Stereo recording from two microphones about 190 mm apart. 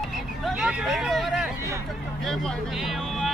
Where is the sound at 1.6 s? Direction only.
15° right (ahead or behind).